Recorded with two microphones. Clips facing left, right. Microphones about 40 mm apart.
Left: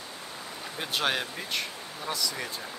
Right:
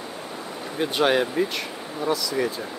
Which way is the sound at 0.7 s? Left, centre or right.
Centre.